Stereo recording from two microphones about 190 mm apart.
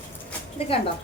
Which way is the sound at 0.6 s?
30° left (ahead or behind).